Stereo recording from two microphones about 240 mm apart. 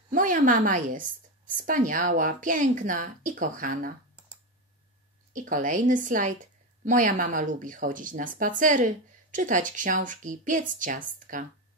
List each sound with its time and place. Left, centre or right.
0.1 s speech: right
5.3 s speech: right